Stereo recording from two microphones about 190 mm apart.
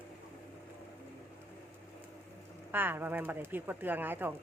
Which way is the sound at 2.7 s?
10° right (ahead or behind).